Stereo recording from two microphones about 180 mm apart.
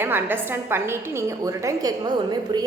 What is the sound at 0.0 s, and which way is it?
A woman's voice, 10° right (ahead or behind).